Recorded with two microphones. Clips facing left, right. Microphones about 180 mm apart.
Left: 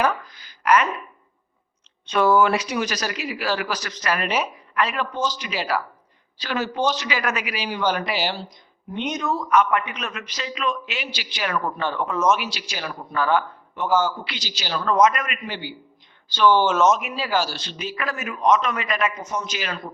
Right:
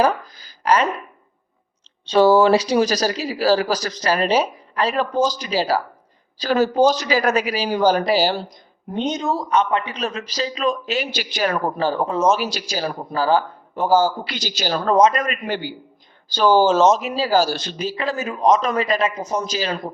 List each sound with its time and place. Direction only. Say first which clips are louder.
0.0 s speech: right 4 dB; 35° right (ahead or behind)
2.0 s a man's voice: right 5 dB; 30° right (ahead or behind)